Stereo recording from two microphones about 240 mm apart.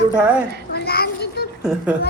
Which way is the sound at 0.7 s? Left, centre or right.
Left.